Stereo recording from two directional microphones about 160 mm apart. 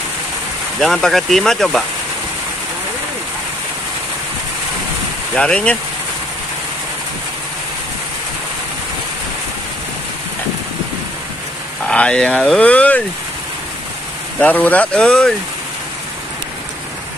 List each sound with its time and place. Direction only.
0.7 s speech: centre (ahead or behind)
5.3 s speech: 5° left (ahead or behind)
11.9 s speech: 5° left (ahead or behind)
14.4 s speech: 10° left (ahead or behind)